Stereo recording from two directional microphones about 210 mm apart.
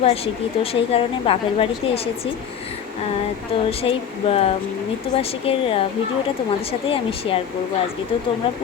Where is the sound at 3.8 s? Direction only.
30° left (ahead or behind).